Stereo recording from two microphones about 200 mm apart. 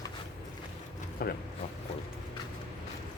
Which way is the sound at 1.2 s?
45° left (ahead or behind).